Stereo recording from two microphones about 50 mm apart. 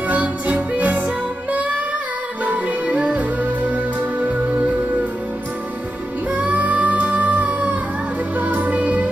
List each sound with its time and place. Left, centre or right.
0.1 s music: right
6.3 s music: right